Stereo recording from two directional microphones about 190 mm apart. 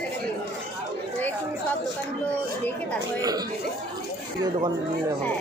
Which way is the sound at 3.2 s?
20° right (ahead or behind).